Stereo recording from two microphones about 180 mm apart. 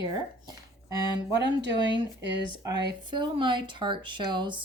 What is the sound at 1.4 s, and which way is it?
Speech, 75° right (ahead or behind).